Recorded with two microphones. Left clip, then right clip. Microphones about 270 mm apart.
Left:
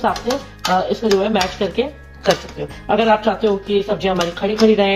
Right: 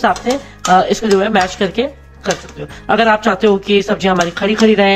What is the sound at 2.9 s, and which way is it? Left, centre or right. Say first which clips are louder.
Speech: right 3 dB; centre.